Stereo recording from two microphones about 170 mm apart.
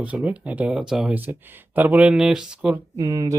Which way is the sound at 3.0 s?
20° right (ahead or behind).